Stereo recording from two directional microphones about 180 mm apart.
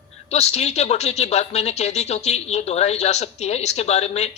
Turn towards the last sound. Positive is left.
turn(degrees=35)  # may be behind; listen again after turning